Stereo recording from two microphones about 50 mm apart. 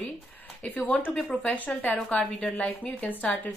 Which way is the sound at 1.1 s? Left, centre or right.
Centre.